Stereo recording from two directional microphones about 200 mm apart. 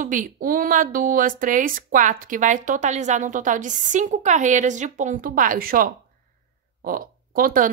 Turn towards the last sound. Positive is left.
turn(degrees=-45)  # may be behind; listen again after turning